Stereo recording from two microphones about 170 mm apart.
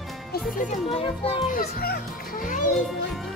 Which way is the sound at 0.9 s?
35° left (ahead or behind).